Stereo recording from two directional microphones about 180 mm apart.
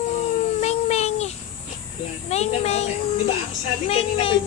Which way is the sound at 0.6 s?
35° left (ahead or behind).